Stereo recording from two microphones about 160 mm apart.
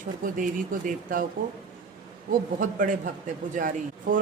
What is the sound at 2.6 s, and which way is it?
Speech, 55° right (ahead or behind).